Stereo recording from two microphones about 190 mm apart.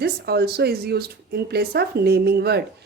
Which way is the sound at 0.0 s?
55° right (ahead or behind).